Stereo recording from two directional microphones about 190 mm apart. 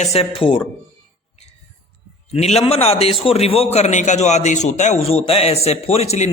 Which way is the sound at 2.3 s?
35° left (ahead or behind).